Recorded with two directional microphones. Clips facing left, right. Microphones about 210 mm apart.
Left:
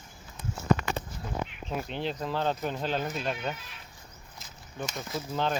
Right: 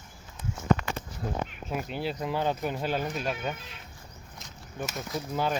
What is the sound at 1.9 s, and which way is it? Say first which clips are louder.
Speech: right 1 dB; 5° right (ahead or behind).